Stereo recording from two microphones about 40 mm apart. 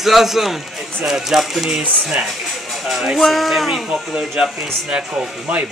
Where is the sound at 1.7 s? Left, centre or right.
Right.